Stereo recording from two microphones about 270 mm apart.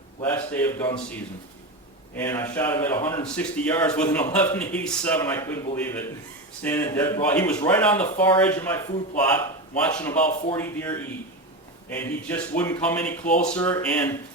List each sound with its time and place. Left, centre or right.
0.2 s speech: centre
2.1 s speech: centre
10.2 s speech: left
10.6 s speech: centre